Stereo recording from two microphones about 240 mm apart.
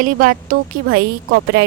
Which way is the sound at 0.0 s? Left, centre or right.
Right.